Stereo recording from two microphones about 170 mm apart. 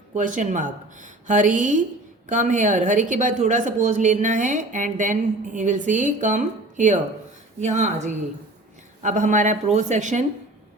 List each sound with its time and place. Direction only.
0.1 s a woman's voice: 50° right (ahead or behind)